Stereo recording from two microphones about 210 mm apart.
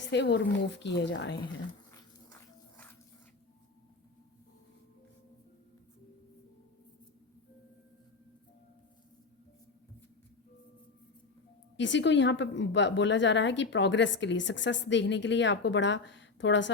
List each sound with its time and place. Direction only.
0.1 s speech: 55° left (ahead or behind)
11.8 s speech: 60° left (ahead or behind)